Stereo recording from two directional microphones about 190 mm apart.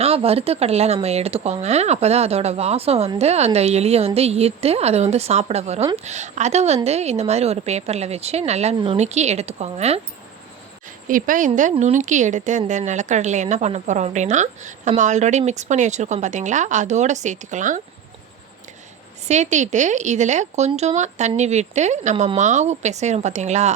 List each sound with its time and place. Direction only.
0.0 s a woman's voice: 30° right (ahead or behind)
11.1 s a woman's voice: 45° right (ahead or behind)
19.3 s a woman's voice: 40° right (ahead or behind)